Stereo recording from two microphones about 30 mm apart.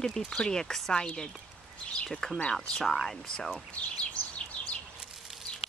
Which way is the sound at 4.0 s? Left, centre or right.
Left.